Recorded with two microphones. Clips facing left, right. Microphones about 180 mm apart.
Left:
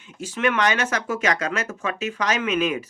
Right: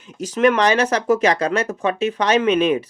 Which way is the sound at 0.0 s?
40° right (ahead or behind).